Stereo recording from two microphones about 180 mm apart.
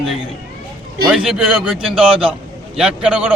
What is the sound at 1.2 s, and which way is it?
A man's voice, 5° right (ahead or behind).